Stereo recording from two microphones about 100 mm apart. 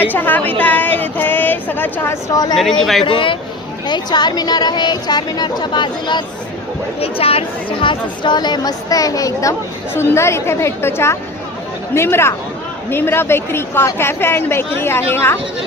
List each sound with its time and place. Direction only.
0.1 s a woman's voice: 20° left (ahead or behind)
2.3 s a woman's voice: 40° left (ahead or behind)
2.6 s speech: 5° left (ahead or behind)
3.0 s speech: 60° left (ahead or behind)
3.8 s a woman's voice: 45° left (ahead or behind)
7.0 s a woman's voice: 75° left (ahead or behind); by 15.4 s 25° left (ahead or behind)